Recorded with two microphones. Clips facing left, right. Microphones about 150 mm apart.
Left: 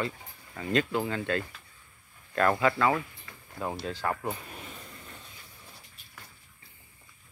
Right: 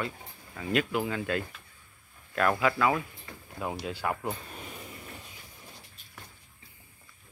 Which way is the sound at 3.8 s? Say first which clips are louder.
Even; 10° right (ahead or behind).